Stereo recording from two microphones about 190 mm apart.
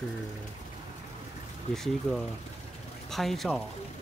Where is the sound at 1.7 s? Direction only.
Centre (ahead or behind).